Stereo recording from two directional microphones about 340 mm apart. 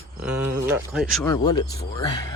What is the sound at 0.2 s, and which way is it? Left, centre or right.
Speech, right.